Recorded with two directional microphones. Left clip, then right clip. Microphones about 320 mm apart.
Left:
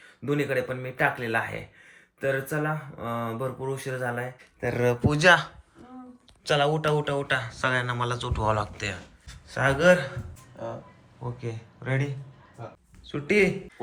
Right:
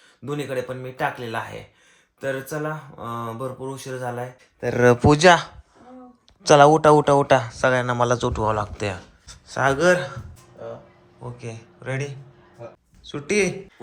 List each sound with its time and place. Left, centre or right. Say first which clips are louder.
0.3 s speech: left 1 dB; centre
3.0 s speech: right 2 dB; centre
4.6 s speech: right 9 dB; right
11.3 s a man's voice: right 1 dB; centre